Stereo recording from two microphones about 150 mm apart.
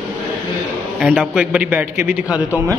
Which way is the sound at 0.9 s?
5° right (ahead or behind).